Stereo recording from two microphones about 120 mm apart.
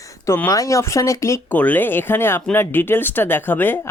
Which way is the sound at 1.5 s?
15° left (ahead or behind).